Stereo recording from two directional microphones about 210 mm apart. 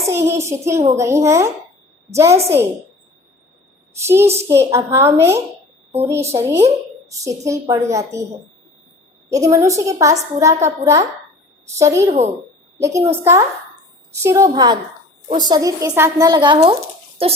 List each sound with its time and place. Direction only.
0.0 s a child's voice: 10° right (ahead or behind)
3.9 s a woman's voice: 10° right (ahead or behind)
9.3 s a woman's voice: 15° right (ahead or behind)
12.0 s speech: 35° right (ahead or behind)
12.8 s a woman's voice: 15° right (ahead or behind)
14.1 s a woman's voice: 15° right (ahead or behind)